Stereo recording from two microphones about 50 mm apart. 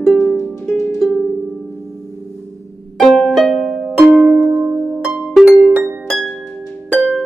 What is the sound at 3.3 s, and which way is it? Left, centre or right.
Music, centre.